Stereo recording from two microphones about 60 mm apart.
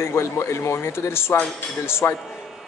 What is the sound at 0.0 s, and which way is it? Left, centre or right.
A man's voice, left.